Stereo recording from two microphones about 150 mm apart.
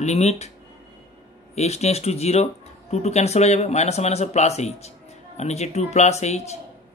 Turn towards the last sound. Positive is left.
turn(degrees=45)  # may be behind; listen again after turning